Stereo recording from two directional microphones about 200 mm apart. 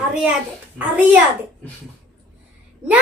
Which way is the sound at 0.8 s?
10° right (ahead or behind).